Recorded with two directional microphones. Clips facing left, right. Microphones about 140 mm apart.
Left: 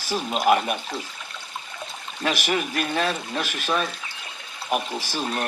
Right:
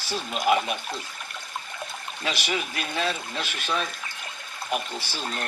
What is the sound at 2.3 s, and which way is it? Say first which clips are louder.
Speech: left 5 dB; 50° left (ahead or behind).